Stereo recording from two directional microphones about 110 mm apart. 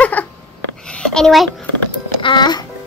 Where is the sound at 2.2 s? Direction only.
45° left (ahead or behind).